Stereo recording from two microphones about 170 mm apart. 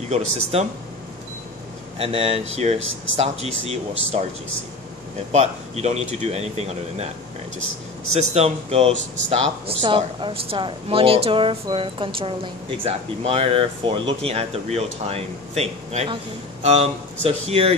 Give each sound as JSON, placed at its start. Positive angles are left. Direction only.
{"t": 0.1, "sound": "speech", "side_deg": -40}
{"t": 2.0, "sound": "speech", "side_deg": -35}
{"t": 5.3, "sound": "speech", "side_deg": -40}
{"t": 8.3, "sound": "speech", "side_deg": -40}